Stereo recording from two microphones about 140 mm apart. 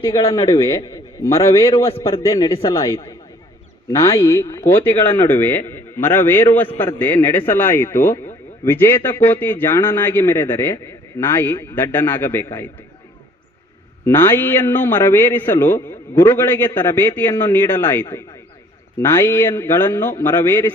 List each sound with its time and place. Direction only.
0.2 s a man's voice: 40° left (ahead or behind)
0.5 s a man's voice: 20° left (ahead or behind)
1.7 s a man's voice: 40° left (ahead or behind)
4.0 s a man's voice: 20° left (ahead or behind)
14.0 s a man's voice: 15° left (ahead or behind)